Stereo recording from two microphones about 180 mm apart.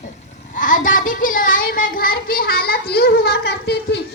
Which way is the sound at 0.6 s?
45° left (ahead or behind).